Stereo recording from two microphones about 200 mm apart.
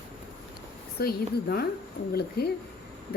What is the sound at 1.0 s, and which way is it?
A woman's voice, 50° left (ahead or behind).